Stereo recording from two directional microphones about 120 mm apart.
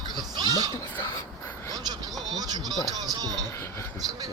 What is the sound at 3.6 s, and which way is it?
Speech, 25° left (ahead or behind).